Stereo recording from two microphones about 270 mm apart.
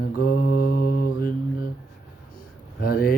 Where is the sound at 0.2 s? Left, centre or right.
Left.